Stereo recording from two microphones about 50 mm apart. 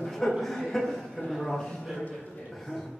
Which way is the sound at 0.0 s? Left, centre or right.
Centre.